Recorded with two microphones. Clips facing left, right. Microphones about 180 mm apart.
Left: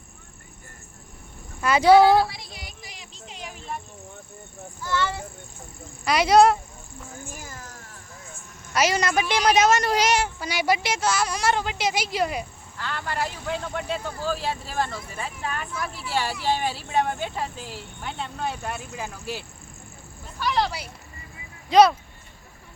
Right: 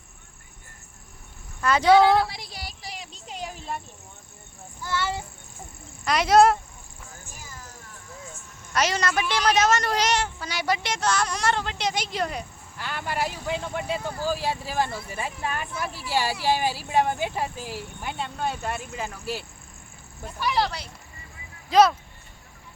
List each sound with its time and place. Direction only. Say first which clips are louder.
1.6 s a woman's voice: left 2 dB; 10° left (ahead or behind)
3.2 s a sound: right 2 dB; 45° right (ahead or behind)
6.1 s speech: left 1 dB; centre (ahead or behind)
8.7 s a woman's voice: left 2 dB; 5° left (ahead or behind)
12.8 s speech: even; 10° right (ahead or behind)
20.4 s speech: even; 5° right (ahead or behind)
20.7 s a woman's voice: left 1 dB; 10° left (ahead or behind)
21.7 s speech: left 2 dB; centre (ahead or behind)